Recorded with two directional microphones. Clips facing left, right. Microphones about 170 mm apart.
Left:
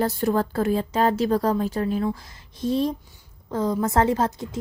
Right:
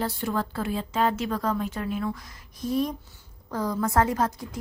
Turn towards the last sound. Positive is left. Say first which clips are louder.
# left 4 dB
turn(degrees=25)  # may be behind; listen again after turning